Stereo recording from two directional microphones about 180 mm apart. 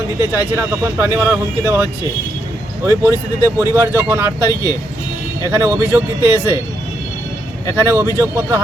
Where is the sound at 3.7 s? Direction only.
15° right (ahead or behind).